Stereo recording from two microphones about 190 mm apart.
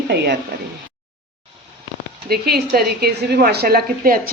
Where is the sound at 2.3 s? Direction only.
55° right (ahead or behind).